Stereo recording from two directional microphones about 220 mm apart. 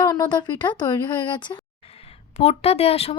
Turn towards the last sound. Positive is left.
turn(degrees=25)  # may be behind; listen again after turning